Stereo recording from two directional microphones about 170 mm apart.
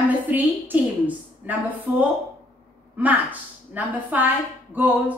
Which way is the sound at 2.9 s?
10° right (ahead or behind).